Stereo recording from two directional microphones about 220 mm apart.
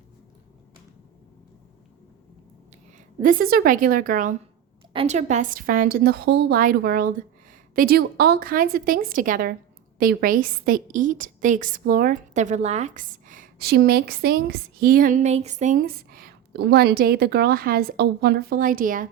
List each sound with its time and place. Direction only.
3.2 s a woman's voice: 40° right (ahead or behind)